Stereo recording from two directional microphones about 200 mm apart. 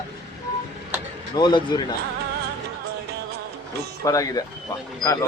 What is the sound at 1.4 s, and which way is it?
Speech, 20° left (ahead or behind).